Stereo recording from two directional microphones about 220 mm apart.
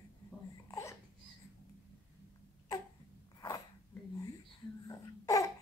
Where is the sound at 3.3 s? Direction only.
15° left (ahead or behind).